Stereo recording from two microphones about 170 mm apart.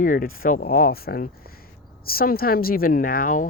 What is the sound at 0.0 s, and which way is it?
Speech, 55° left (ahead or behind).